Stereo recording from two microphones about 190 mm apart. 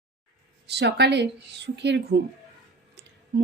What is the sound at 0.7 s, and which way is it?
A woman's voice, 60° right (ahead or behind).